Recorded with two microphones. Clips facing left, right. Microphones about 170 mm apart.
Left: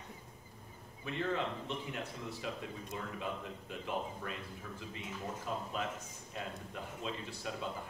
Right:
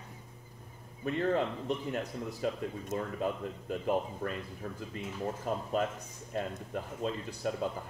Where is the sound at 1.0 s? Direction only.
45° right (ahead or behind).